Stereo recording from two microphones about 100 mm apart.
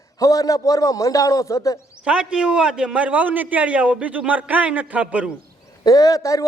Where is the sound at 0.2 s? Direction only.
35° left (ahead or behind).